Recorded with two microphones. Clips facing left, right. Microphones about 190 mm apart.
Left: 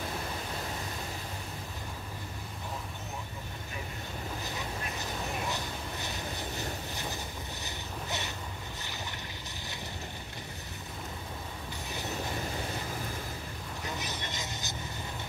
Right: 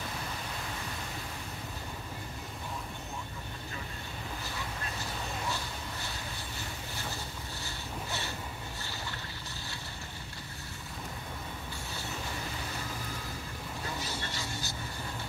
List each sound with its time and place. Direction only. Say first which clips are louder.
5.5 s a sound: left 1 dB; 20° left (ahead or behind)
7.6 s vehicle: right 1 dB; 20° left (ahead or behind)
13.8 s vehicle: left 1 dB; 20° left (ahead or behind)